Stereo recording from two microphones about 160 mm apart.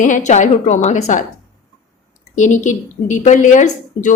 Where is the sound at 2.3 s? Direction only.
50° left (ahead or behind).